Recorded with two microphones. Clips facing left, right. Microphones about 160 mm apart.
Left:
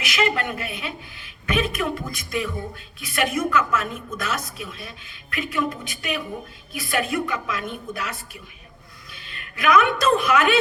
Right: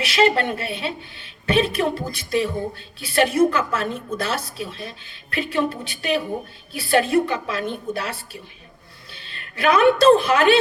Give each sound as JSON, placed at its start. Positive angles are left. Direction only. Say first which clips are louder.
{"t": 0.0, "sound": "a woman's voice", "louder": "right 5 dB", "side_deg": -30}